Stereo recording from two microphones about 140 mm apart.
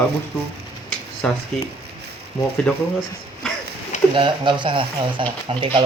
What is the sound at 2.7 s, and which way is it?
Speech, 5° left (ahead or behind).